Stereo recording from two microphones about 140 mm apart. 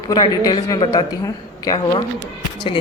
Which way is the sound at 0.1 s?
30° left (ahead or behind).